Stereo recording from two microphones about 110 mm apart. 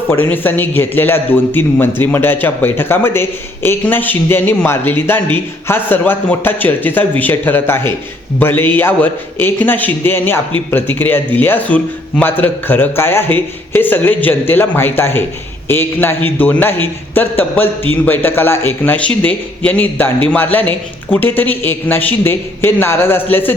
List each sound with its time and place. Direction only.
0.1 s a man's voice: 15° left (ahead or behind)